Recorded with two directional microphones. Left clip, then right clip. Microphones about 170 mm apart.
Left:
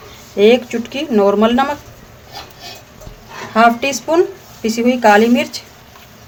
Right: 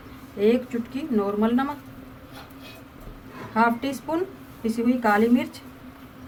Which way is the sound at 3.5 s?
45° left (ahead or behind).